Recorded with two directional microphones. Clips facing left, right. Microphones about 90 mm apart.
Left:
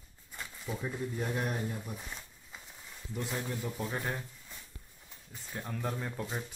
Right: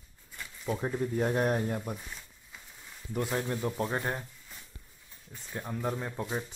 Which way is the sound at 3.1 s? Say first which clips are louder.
Right 5 dB; 55° right (ahead or behind).